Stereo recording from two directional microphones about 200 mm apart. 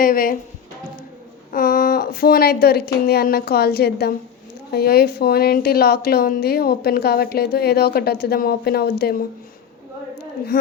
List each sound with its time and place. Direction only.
0.0 s a woman's voice: 45° left (ahead or behind)
1.5 s a woman's voice: 45° left (ahead or behind)
10.4 s a woman's voice: 50° left (ahead or behind)